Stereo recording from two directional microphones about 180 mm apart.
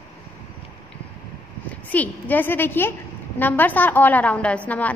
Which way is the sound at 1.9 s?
10° left (ahead or behind).